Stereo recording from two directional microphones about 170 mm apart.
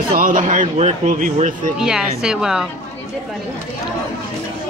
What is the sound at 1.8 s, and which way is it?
Speech, 5° right (ahead or behind).